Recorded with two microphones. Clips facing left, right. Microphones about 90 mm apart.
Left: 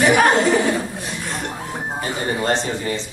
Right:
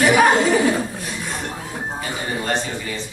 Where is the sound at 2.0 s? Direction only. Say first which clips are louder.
Left 5 dB; 30° left (ahead or behind).